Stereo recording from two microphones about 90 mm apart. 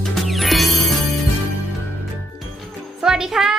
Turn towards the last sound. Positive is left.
turn(degrees=-5)  # may be behind; listen again after turning